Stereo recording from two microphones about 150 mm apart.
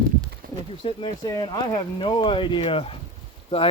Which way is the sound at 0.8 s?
30° left (ahead or behind).